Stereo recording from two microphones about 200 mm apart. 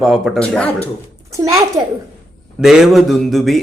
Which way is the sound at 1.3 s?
15° right (ahead or behind).